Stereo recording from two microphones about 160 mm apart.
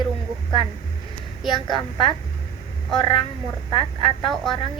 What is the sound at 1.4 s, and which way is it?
A woman's voice, 30° left (ahead or behind).